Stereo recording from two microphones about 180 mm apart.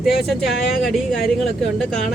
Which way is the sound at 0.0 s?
Centre (ahead or behind).